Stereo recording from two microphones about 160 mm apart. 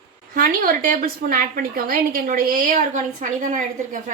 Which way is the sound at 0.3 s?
65° right (ahead or behind).